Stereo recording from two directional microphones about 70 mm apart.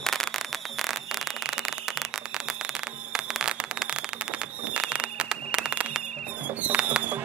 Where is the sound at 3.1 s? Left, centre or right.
Centre.